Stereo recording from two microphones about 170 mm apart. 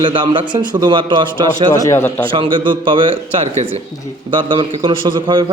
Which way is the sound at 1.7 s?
15° left (ahead or behind).